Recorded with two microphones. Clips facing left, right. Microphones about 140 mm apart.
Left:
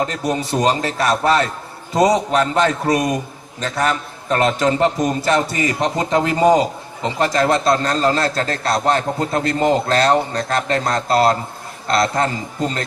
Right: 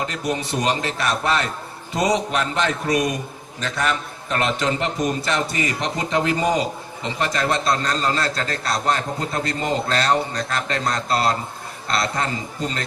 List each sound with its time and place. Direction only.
0.0 s a man's voice: 35° left (ahead or behind)